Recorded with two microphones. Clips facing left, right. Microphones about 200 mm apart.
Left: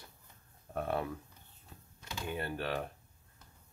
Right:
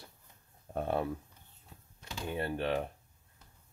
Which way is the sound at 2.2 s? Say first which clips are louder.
Right 4 dB; 25° right (ahead or behind).